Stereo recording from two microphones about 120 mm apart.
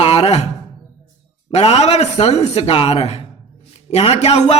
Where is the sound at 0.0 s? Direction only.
55° left (ahead or behind).